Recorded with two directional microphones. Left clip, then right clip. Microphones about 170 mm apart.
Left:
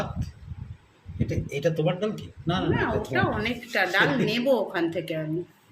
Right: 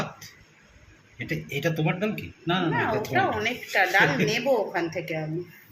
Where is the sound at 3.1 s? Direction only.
70° left (ahead or behind).